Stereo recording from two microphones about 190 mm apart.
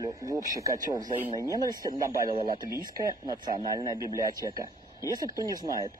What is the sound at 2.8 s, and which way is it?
Speech, 20° right (ahead or behind).